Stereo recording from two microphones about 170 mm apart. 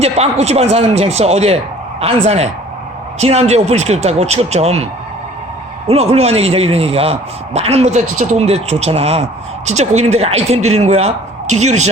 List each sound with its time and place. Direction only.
0.0 s a man's voice: 40° right (ahead or behind)
5.9 s a man's voice: 40° right (ahead or behind)